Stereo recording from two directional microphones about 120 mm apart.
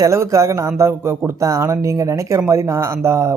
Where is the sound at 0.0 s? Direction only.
25° right (ahead or behind).